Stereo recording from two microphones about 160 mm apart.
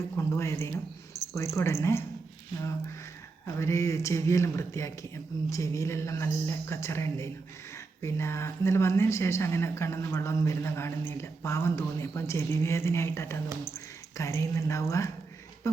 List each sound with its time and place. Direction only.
0.2 s speech: 15° left (ahead or behind)
3.4 s speech: 15° left (ahead or behind)